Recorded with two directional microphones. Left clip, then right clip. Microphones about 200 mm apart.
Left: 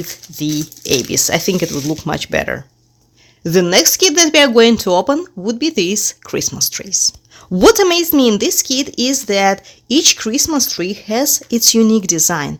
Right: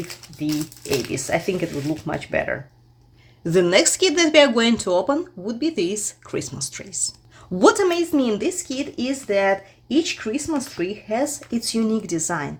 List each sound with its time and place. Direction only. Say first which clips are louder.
0.4 s speech: left 5 dB; 60° left (ahead or behind)
3.4 s speech: left 5 dB; 35° left (ahead or behind)